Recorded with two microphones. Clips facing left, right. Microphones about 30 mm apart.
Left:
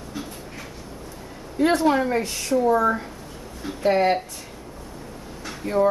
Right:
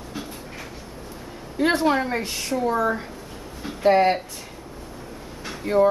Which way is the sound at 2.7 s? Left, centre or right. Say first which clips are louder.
Left 3 dB; centre.